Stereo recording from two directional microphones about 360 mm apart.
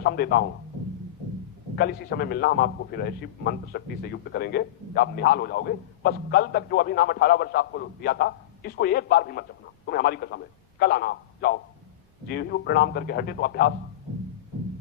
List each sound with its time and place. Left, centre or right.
0.0 s a man's voice: left
1.7 s a man's voice: left